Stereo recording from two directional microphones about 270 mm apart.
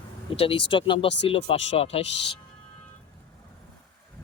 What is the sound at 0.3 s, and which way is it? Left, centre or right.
Speech, centre.